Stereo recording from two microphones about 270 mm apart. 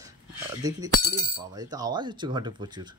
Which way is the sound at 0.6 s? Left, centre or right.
Centre.